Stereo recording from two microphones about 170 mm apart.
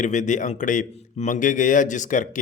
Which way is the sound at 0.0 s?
45° left (ahead or behind).